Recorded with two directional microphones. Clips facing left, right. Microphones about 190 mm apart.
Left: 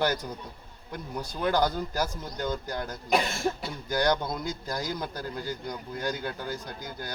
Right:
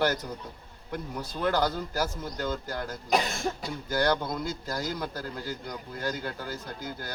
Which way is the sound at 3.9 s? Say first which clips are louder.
Left 1 dB; 15° left (ahead or behind).